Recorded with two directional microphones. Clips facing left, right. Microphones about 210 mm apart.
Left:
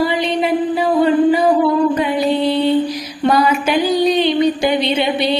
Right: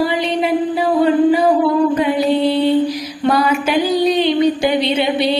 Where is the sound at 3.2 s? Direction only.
5° right (ahead or behind).